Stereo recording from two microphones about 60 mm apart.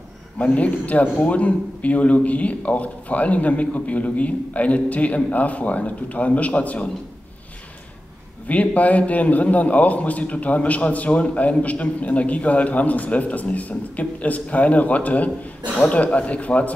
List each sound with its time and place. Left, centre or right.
0.4 s a man's voice: left
8.5 s a man's voice: left